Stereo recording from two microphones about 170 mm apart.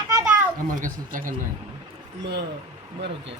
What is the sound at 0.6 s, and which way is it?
Speech, 50° right (ahead or behind).